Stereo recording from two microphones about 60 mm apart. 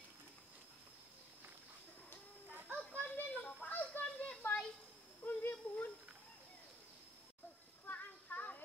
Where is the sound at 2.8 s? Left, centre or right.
Left.